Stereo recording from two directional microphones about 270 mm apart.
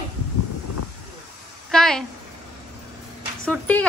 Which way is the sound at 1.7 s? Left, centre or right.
Centre.